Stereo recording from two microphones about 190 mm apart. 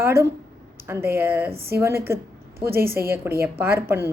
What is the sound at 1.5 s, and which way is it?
A woman's voice, 55° right (ahead or behind).